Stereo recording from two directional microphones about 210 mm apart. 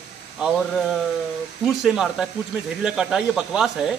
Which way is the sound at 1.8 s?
Centre (ahead or behind).